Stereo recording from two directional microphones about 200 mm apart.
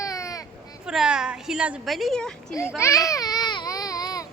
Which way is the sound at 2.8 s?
15° left (ahead or behind).